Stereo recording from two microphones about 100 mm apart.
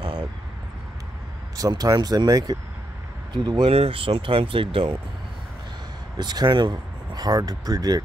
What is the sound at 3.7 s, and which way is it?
Speech, 80° right.